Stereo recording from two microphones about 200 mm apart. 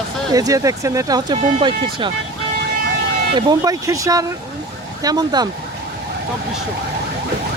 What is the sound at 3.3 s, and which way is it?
Speech, 20° right (ahead or behind).